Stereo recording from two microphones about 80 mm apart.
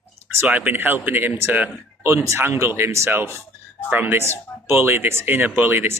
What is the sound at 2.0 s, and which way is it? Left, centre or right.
Speech, right.